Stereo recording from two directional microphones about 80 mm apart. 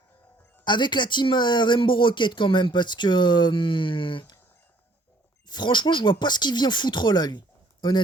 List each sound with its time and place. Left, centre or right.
0.6 s speech: left
5.5 s speech: left